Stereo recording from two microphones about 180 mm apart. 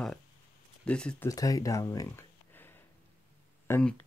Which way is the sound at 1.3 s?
20° left (ahead or behind).